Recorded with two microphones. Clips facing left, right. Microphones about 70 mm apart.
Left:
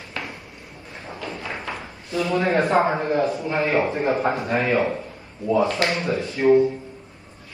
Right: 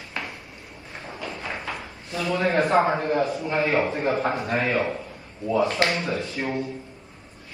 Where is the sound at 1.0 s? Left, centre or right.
Left.